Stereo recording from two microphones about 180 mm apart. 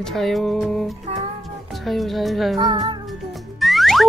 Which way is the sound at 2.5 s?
20° right (ahead or behind).